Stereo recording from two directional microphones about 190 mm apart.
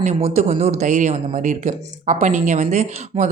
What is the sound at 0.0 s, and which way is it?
Speech, 35° right (ahead or behind).